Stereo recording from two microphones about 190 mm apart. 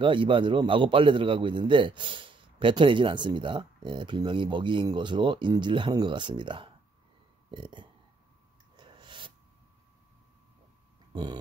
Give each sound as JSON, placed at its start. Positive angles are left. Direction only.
{"t": 0.0, "sound": "a man's voice", "side_deg": -25}
{"t": 8.7, "sound": "snort", "side_deg": -25}